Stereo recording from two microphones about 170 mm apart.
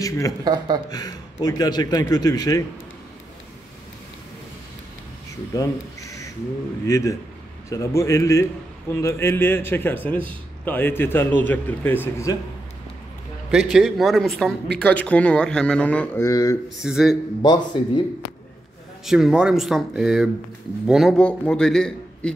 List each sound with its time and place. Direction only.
0.4 s speech: 25° right (ahead or behind)
0.8 s a man's voice: 20° left (ahead or behind)
5.5 s a sound: 20° left (ahead or behind)
6.9 s a man's voice: 20° left (ahead or behind)
13.5 s a man's voice: 5° right (ahead or behind)
16.3 s a man's voice: 20° left (ahead or behind)
16.8 s a man's voice: centre (ahead or behind)
17.4 s a man's voice: 25° left (ahead or behind)
19.0 s a man's voice: 5° right (ahead or behind)